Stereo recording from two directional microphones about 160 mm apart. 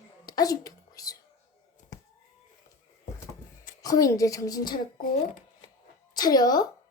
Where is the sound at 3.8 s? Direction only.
20° left (ahead or behind).